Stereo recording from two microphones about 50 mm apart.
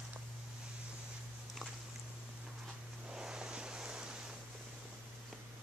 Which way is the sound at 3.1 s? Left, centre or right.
Centre.